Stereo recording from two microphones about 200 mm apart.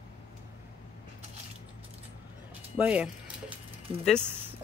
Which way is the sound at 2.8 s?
5° right (ahead or behind).